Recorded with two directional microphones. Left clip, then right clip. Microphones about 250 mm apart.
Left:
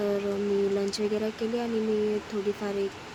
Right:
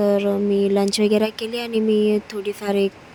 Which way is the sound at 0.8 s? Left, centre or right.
Right.